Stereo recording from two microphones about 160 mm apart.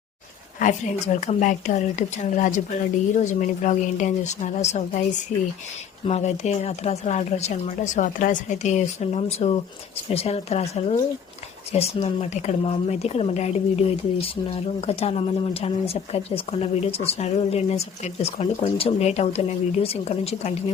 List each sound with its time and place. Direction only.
0.6 s a woman's voice: 50° left (ahead or behind)
6.1 s a woman's voice: 40° left (ahead or behind)